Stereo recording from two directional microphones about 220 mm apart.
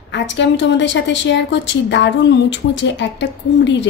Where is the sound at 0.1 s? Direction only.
55° left (ahead or behind).